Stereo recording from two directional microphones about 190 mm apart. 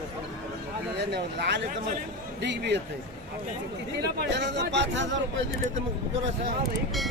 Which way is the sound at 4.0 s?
60° right (ahead or behind).